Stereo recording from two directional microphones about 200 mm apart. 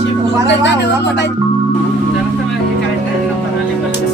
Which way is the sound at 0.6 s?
60° left (ahead or behind).